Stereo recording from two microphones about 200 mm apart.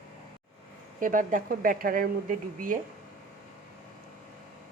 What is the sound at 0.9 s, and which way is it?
Speech, 40° right (ahead or behind).